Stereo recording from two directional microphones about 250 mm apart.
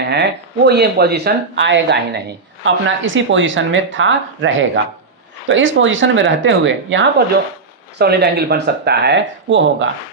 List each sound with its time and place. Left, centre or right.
0.0 s speech: right